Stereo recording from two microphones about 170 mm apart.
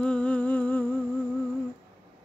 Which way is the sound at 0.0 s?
5° left (ahead or behind).